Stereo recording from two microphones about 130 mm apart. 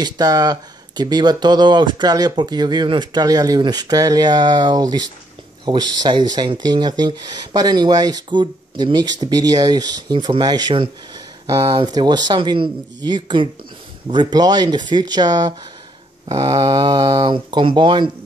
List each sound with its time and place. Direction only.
0.0 s speech: 30° right (ahead or behind)